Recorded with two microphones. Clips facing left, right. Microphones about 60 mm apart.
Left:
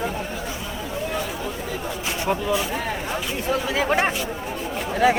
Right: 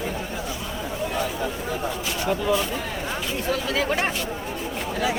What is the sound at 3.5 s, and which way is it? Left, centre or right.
Speech, centre.